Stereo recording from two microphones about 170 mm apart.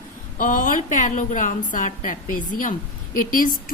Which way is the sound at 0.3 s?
50° left (ahead or behind).